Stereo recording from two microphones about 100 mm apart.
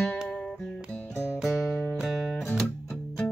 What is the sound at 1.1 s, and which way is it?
Music, 30° left (ahead or behind).